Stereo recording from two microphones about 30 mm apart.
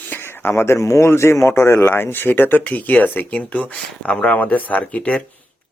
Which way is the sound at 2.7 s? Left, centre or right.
Left.